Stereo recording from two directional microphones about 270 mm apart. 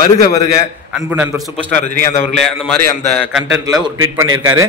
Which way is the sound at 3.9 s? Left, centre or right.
Right.